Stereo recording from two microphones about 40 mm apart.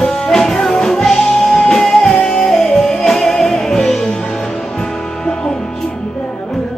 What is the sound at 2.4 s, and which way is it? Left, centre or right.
Music, centre.